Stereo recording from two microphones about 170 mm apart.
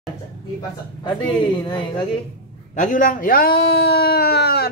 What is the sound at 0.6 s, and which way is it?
Speech, 25° left (ahead or behind).